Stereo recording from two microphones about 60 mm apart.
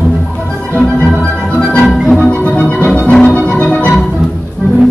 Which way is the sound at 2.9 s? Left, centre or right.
Centre.